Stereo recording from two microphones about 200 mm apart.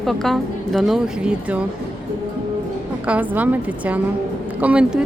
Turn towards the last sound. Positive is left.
turn(degrees=-5)  # may be behind; listen again after turning